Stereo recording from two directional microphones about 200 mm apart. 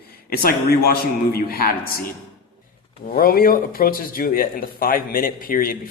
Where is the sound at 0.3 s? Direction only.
50° left (ahead or behind).